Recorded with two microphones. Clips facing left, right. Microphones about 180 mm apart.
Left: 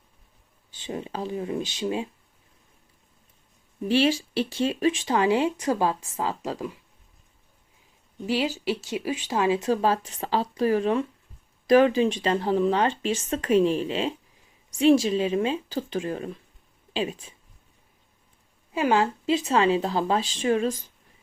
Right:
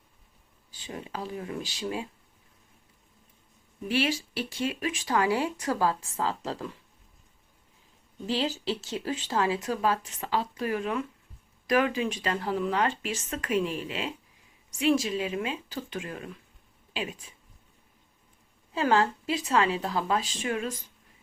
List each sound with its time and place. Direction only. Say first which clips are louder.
0.7 s speech: left 5 dB; 25° left (ahead or behind)
3.8 s speech: left 6 dB; 30° left (ahead or behind); by 6.7 s 15° left (ahead or behind)
8.3 s speech: left 3 dB; 10° left (ahead or behind); by 17.3 s 30° left (ahead or behind)
18.7 s speech: left 2 dB; 15° left (ahead or behind); by 20.7 s 30° left (ahead or behind)